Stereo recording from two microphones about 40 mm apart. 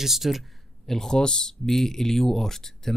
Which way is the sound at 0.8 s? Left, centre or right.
Centre.